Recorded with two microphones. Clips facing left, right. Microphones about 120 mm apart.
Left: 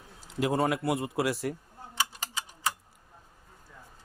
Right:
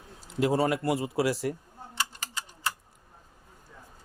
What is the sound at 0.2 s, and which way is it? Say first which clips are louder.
A man's voice: right 2 dB; centre (ahead or behind).